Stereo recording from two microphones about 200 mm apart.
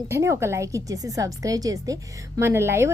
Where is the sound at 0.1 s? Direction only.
15° right (ahead or behind).